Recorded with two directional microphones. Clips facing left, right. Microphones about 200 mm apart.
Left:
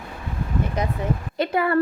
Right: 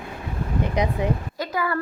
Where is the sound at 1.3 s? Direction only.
25° left (ahead or behind).